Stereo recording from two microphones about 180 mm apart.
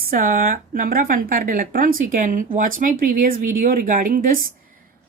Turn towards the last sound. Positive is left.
turn(degrees=-50)  # may be behind; listen again after turning